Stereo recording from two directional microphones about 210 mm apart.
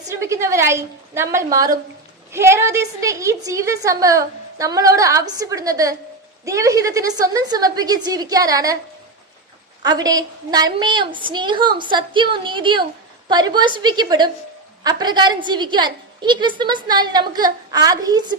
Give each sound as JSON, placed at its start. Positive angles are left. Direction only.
{"t": 0.1, "sound": "a woman's voice", "side_deg": -15}
{"t": 9.8, "sound": "a woman's voice", "side_deg": -20}